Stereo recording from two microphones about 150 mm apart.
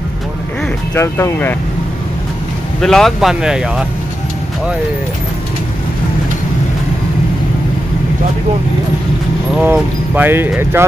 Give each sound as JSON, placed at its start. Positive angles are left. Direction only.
{"t": 0.9, "sound": "speech", "side_deg": 20}
{"t": 2.8, "sound": "speech", "side_deg": 0}
{"t": 9.6, "sound": "speech", "side_deg": -15}